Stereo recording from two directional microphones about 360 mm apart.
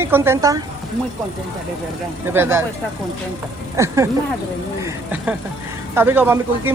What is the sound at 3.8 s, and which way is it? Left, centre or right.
Speech, centre.